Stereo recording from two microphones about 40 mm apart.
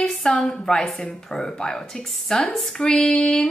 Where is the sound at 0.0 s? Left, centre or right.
Centre.